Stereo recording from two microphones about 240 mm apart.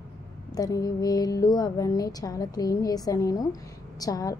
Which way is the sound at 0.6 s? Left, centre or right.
Centre.